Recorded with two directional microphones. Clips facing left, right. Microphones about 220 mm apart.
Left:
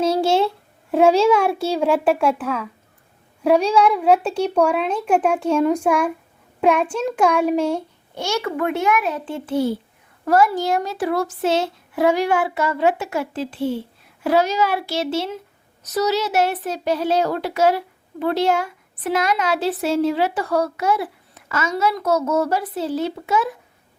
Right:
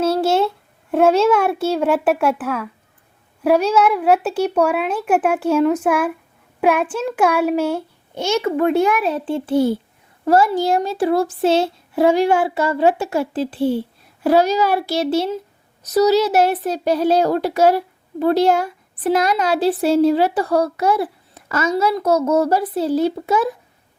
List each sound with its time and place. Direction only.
0.0 s a child's voice: centre (ahead or behind)
8.1 s a child's voice: 20° right (ahead or behind)